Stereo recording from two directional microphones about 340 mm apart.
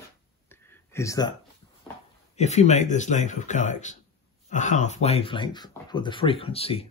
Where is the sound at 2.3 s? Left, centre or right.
Centre.